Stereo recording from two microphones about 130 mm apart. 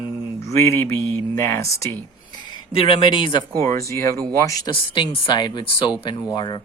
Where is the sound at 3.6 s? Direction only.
20° left (ahead or behind).